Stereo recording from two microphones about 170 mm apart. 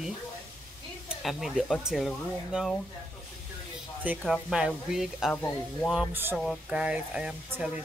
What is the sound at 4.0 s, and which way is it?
Speech, 5° right (ahead or behind).